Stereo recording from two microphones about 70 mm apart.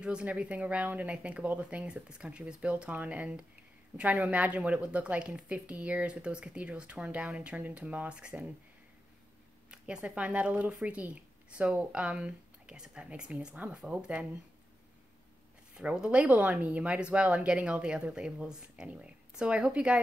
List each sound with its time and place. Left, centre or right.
0.0 s speech: centre
9.7 s speech: centre
15.7 s speech: centre